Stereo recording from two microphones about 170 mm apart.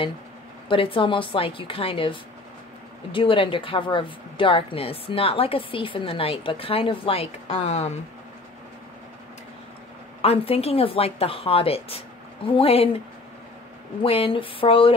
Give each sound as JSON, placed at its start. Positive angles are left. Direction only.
{"t": 0.7, "sound": "a woman's voice", "side_deg": 30}
{"t": 10.2, "sound": "a woman's voice", "side_deg": 35}
{"t": 14.0, "sound": "a woman's voice", "side_deg": 35}